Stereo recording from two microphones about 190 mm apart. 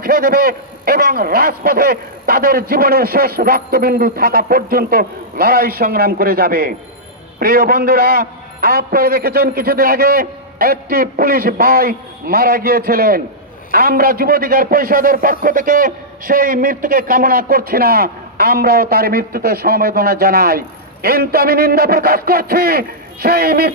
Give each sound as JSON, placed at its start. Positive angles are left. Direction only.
{"t": 0.0, "sound": "a man's voice", "side_deg": -50}